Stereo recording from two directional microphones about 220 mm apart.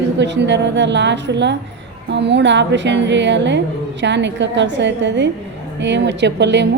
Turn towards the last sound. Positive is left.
turn(degrees=-50)  # may be behind; listen again after turning